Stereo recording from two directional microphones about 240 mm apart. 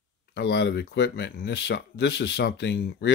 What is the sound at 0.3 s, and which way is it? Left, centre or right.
Speech, left.